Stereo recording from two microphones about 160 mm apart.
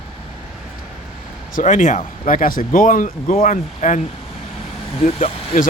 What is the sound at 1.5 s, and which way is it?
Speech, 55° left (ahead or behind).